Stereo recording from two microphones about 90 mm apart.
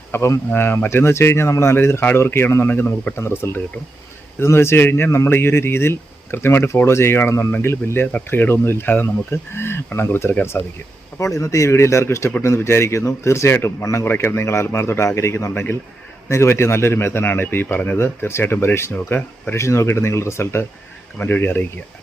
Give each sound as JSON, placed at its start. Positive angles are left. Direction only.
{"t": 0.1, "sound": "speech", "side_deg": 30}